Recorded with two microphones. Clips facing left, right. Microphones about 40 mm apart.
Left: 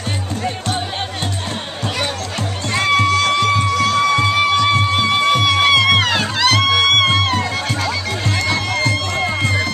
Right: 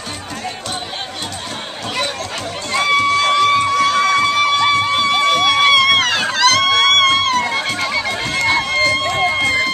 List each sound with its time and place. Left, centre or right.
2.7 s music: centre
3.5 s a sound: centre
4.1 s music: centre
7.4 s music: centre